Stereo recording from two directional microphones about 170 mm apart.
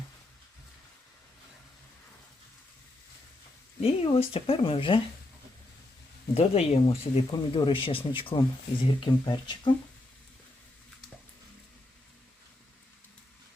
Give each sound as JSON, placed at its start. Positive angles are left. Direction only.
{"t": 3.8, "sound": "speech", "side_deg": 35}
{"t": 6.3, "sound": "speech", "side_deg": 35}